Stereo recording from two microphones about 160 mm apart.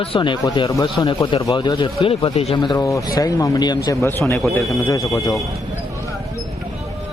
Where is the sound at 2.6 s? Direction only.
20° left (ahead or behind).